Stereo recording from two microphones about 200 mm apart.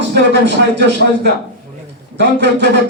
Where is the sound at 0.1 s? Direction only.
60° right (ahead or behind).